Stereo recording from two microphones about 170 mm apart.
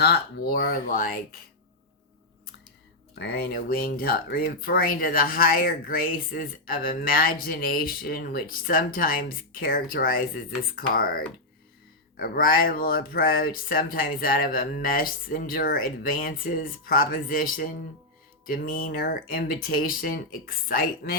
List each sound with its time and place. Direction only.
0.0 s speech: 70° left (ahead or behind)
3.2 s speech: 65° left (ahead or behind)
12.2 s speech: 60° left (ahead or behind)